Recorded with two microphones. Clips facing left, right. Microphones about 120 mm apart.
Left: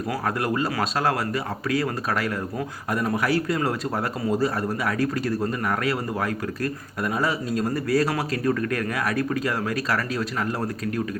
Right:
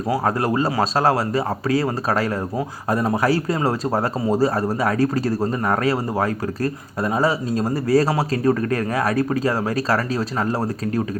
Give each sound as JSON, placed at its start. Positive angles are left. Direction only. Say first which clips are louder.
{"t": 0.3, "sound": "speech", "louder": "right 2 dB", "side_deg": -30}